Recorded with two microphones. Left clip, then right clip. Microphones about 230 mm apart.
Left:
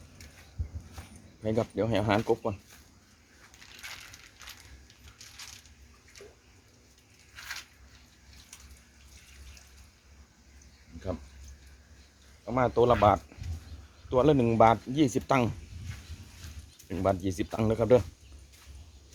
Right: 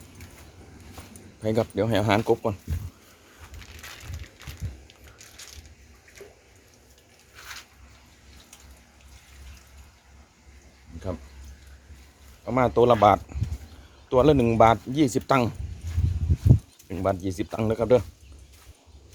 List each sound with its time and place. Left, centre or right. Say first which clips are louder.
1.4 s speech: right 5 dB; right
12.5 s speech: right 5 dB; right
16.9 s speech: right 2 dB; centre